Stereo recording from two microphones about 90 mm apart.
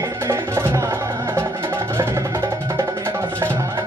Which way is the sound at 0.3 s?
35° right (ahead or behind).